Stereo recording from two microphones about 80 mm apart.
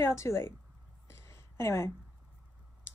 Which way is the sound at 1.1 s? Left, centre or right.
Left.